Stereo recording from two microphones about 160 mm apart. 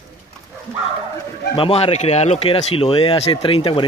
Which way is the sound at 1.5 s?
35° left (ahead or behind).